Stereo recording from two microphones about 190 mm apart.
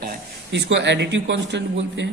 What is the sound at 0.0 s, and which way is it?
A man's voice, 55° right (ahead or behind).